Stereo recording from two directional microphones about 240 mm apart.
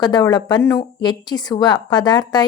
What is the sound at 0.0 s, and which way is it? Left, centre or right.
A woman's voice, centre.